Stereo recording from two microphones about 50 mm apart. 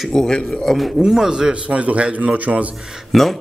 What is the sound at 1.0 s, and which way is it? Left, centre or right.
A man's voice, centre.